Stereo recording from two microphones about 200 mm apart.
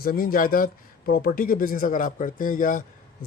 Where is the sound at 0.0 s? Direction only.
45° left (ahead or behind).